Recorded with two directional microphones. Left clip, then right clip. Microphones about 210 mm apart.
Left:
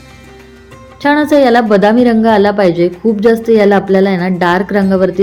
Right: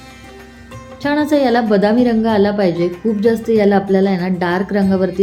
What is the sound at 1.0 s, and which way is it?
A woman's voice, 15° left (ahead or behind).